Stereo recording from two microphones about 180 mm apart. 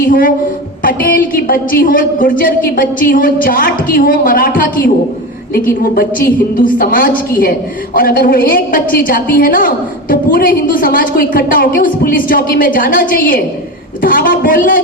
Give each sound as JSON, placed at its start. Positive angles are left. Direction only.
{"t": 0.1, "sound": "a woman's voice", "side_deg": 50}